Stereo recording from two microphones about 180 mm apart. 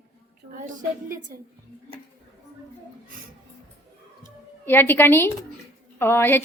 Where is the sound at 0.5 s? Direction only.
45° right (ahead or behind).